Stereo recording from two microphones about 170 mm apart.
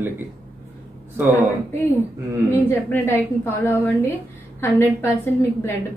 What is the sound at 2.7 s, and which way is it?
A woman's voice, 15° left (ahead or behind).